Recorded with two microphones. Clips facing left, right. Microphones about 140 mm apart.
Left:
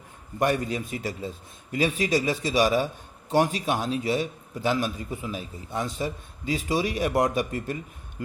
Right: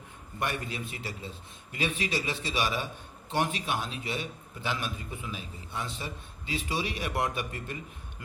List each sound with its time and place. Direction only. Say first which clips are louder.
0.3 s a man's voice: left 9 dB; 40° left (ahead or behind)